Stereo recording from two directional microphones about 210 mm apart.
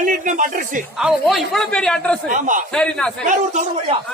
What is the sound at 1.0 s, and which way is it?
Speech, centre (ahead or behind).